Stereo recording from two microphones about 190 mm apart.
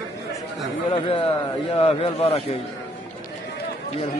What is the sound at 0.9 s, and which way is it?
A man's voice, 25° left (ahead or behind).